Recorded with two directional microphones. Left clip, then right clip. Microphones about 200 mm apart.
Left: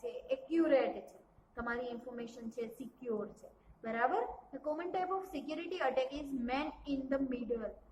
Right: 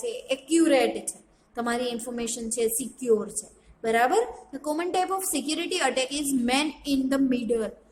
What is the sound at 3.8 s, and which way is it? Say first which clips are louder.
A woman's voice: right 12 dB; 55° right (ahead or behind).